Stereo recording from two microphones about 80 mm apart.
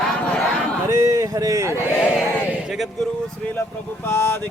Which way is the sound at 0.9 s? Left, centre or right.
Right.